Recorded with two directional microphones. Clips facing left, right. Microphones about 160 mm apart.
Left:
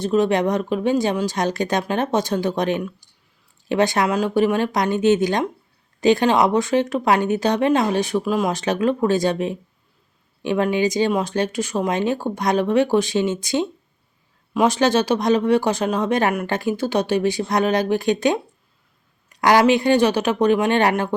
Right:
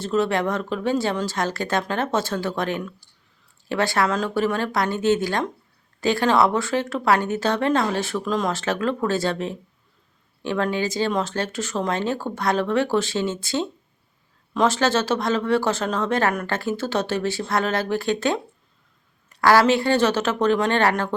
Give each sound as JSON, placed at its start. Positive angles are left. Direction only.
{"t": 0.0, "sound": "speech", "side_deg": 15}